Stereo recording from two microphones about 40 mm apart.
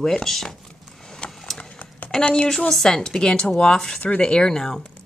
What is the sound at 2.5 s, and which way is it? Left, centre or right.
Speech, centre.